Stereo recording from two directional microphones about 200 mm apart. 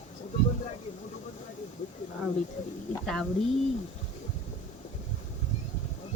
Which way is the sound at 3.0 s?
Centre (ahead or behind).